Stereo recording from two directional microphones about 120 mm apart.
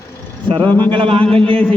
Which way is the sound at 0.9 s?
50° right (ahead or behind).